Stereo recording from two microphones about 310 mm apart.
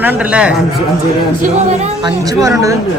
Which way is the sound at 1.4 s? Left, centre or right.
Right.